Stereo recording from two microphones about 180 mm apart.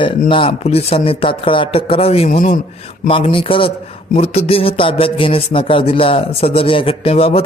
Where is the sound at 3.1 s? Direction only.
30° left (ahead or behind).